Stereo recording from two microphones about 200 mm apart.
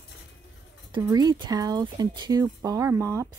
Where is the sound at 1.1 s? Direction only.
20° right (ahead or behind).